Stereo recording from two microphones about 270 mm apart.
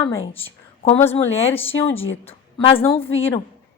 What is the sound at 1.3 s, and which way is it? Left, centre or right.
Speech, left.